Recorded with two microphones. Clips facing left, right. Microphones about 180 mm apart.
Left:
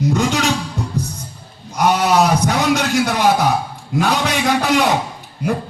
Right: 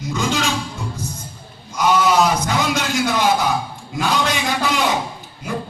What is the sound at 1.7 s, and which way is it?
Wild animals, 65° left (ahead or behind).